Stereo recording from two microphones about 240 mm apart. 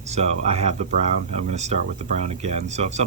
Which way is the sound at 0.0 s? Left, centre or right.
Right.